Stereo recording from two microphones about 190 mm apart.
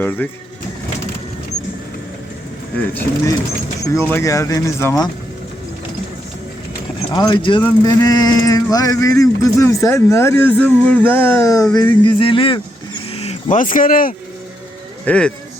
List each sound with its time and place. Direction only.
0.0 s speech: 10° left (ahead or behind)
2.9 s speech: 10° left (ahead or behind)
7.1 s speech: 25° left (ahead or behind); by 14.2 s 50° left (ahead or behind)
15.0 s speech: 5° left (ahead or behind)